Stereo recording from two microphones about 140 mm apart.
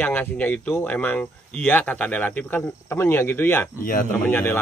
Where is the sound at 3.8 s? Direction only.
85° left.